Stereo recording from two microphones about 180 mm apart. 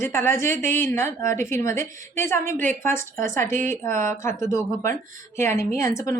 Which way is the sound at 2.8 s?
15° left (ahead or behind).